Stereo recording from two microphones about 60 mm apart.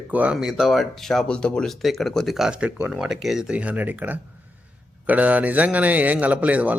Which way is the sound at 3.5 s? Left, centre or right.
Right.